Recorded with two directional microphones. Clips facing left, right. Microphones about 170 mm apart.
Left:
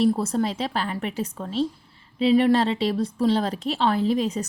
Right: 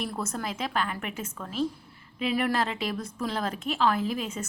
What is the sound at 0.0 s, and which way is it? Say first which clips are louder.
A woman's voice: left 11 dB; 30° left (ahead or behind).